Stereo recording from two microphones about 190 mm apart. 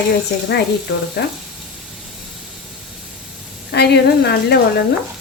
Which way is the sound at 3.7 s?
60° left (ahead or behind).